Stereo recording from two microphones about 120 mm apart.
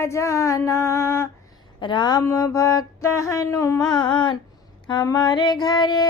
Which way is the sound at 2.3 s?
25° left (ahead or behind).